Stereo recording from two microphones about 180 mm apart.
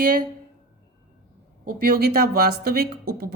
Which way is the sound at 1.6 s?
55° right (ahead or behind).